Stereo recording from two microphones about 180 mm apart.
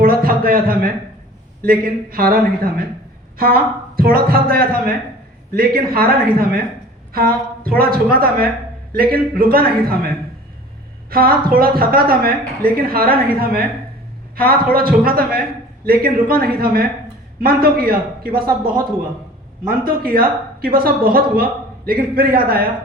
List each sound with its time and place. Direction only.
0.0 s a sound: 55° right (ahead or behind)
1.6 s a woman's voice: 55° right (ahead or behind)
11.1 s a woman's voice: 55° right (ahead or behind)
19.6 s a woman's voice: 55° right (ahead or behind)